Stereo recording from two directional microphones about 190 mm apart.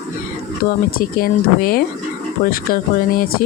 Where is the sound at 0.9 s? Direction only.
50° left (ahead or behind).